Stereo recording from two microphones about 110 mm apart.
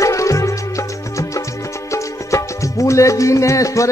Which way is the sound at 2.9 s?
30° left (ahead or behind).